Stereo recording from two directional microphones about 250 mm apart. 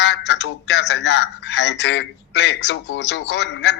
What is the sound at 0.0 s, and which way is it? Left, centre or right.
Speech, left.